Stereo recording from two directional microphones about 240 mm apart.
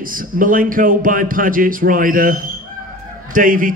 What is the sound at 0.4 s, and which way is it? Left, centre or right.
A man's voice, right.